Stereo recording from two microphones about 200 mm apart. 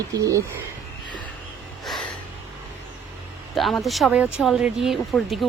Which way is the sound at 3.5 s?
Centre (ahead or behind).